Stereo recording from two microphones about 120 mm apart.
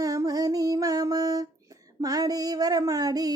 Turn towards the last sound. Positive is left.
turn(degrees=-30)  # may be behind; listen again after turning